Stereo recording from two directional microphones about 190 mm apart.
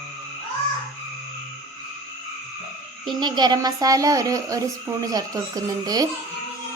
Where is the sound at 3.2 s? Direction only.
25° right (ahead or behind).